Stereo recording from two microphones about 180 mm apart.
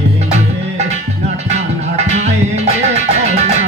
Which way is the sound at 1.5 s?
40° right (ahead or behind).